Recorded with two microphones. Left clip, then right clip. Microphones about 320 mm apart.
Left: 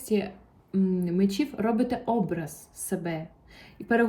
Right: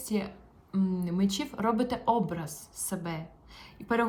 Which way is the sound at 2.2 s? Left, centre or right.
Centre.